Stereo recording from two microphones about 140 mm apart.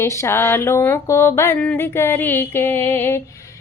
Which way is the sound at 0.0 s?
20° left (ahead or behind).